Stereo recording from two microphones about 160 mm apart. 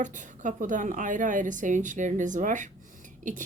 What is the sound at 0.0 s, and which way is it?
Speech, 50° right (ahead or behind).